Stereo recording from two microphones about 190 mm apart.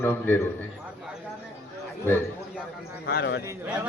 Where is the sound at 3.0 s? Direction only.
60° left (ahead or behind).